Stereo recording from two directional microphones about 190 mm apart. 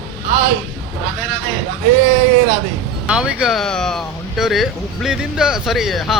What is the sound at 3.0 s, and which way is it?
Speech, 5° right (ahead or behind).